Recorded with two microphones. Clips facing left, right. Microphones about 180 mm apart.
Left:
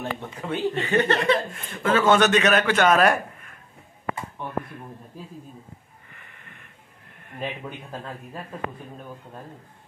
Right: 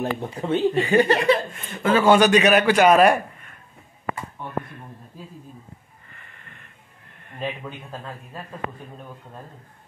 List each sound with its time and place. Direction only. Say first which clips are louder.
0.0 s speech: right 5 dB; 35° right (ahead or behind)
0.6 s speech: right 4 dB; 10° right (ahead or behind)